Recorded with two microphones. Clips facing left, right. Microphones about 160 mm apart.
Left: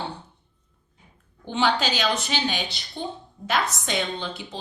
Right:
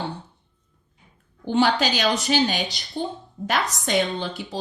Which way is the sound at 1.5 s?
45° right (ahead or behind).